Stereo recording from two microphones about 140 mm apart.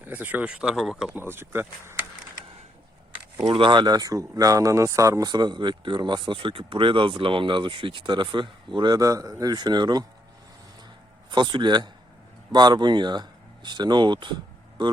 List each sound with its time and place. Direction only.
0.0 s speech: 10° right (ahead or behind)
1.1 s speech: 15° right (ahead or behind)
3.4 s speech: 35° right (ahead or behind)
11.3 s speech: 35° right (ahead or behind)